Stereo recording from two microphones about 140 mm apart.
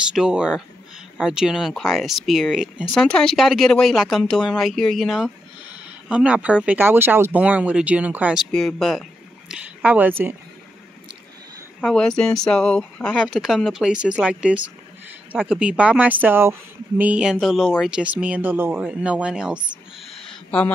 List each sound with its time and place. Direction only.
0.1 s speech: 5° right (ahead or behind)
8.5 s speech: 5° left (ahead or behind)
9.5 s a woman's voice: 10° right (ahead or behind)
11.8 s speech: 5° left (ahead or behind)